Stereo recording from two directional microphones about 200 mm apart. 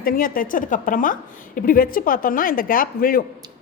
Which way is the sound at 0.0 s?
45° left (ahead or behind).